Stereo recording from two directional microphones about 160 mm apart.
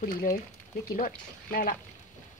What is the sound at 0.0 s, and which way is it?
Speech, 65° left (ahead or behind).